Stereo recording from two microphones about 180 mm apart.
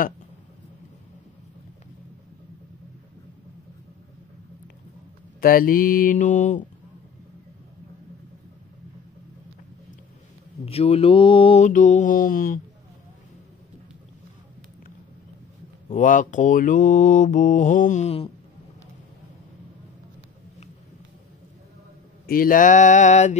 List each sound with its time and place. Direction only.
5.4 s mantra: 55° left (ahead or behind)
10.6 s mantra: 35° left (ahead or behind); by 12.5 s 50° left (ahead or behind)
15.9 s mantra: 45° left (ahead or behind)
22.2 s mantra: 55° left (ahead or behind)